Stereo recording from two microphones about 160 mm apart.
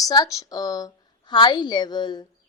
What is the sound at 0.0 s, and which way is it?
A woman's voice, 20° left (ahead or behind).